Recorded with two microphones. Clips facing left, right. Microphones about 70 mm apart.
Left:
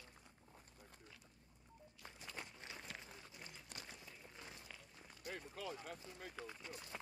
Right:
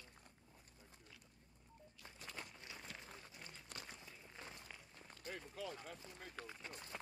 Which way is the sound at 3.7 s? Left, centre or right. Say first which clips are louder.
Right 1 dB; right.